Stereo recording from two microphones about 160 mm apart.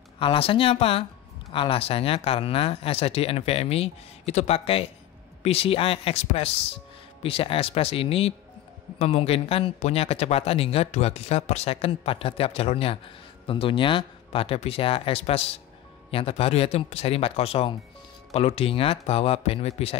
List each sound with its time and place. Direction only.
0.2 s speech: 35° left (ahead or behind)